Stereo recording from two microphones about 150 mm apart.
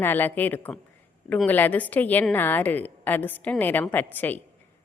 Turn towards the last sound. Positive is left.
turn(degrees=10)  # may be behind; listen again after turning